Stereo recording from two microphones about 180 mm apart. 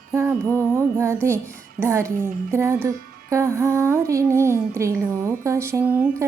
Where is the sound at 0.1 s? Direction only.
10° right (ahead or behind).